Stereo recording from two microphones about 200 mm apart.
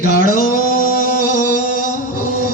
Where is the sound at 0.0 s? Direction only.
45° left (ahead or behind).